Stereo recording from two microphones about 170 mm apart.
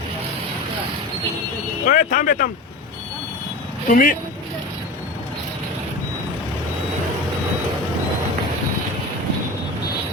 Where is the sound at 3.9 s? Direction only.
55° left (ahead or behind).